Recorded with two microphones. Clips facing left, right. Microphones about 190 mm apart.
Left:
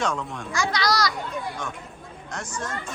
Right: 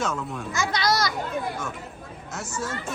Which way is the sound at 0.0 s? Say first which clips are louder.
Left 1 dB; 5° right (ahead or behind).